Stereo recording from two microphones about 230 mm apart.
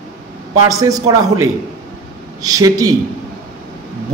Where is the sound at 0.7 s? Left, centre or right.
Centre.